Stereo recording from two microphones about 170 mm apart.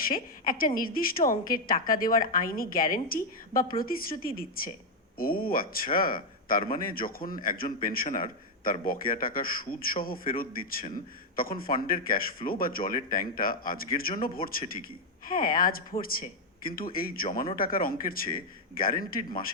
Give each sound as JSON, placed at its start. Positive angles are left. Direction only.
{"t": 0.1, "sound": "a woman's voice", "side_deg": 55}